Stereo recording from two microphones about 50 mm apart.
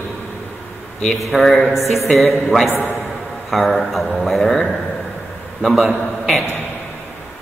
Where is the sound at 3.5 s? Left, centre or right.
Centre.